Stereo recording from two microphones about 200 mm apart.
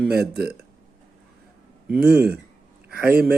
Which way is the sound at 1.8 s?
5° right (ahead or behind).